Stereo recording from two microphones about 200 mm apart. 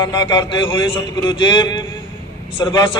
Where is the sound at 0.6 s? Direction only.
25° left (ahead or behind).